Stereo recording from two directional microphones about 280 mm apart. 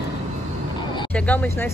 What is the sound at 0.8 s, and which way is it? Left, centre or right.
Vehicle, centre.